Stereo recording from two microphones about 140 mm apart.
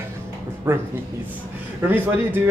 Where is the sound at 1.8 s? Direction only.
15° right (ahead or behind).